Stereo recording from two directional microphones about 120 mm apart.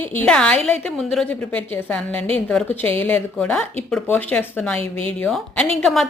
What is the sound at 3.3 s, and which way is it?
A woman's voice, 5° left (ahead or behind).